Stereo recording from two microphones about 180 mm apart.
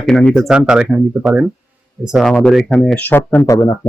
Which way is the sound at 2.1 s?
Centre (ahead or behind).